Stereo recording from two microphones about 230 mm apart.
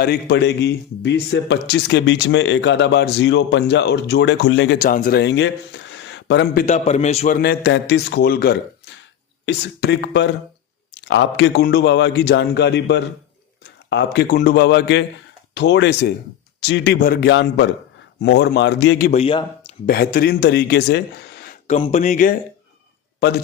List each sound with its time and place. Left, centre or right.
0.0 s speech: left
7.4 s a man's voice: left
19.1 s speech: left
19.9 s speech: left
21.4 s a sound: left
21.8 s speech: left